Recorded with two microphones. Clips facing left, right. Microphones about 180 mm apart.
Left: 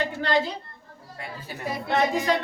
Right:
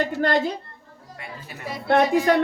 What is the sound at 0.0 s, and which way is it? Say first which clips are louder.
Speech: right 3 dB; 50° right (ahead or behind).